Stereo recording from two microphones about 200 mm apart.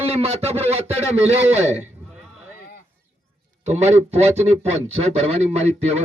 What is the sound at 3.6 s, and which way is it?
Speech, 30° right (ahead or behind).